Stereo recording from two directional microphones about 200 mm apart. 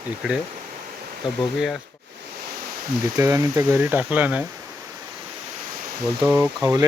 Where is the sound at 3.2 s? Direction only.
15° right (ahead or behind).